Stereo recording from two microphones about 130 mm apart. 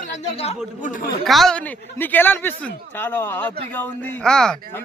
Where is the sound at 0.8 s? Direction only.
90° left.